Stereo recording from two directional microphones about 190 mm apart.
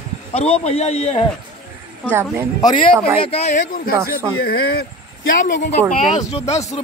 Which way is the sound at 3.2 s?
30° left (ahead or behind).